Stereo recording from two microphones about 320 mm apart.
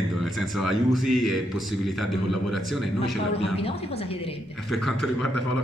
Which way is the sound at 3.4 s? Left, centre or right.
Centre.